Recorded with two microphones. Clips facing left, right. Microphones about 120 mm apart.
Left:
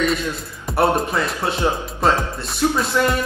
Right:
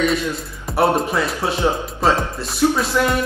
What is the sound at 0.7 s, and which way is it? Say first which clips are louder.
Music: right 1 dB; centre (ahead or behind).